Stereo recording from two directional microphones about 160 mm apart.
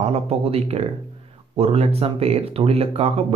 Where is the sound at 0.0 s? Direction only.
40° right (ahead or behind).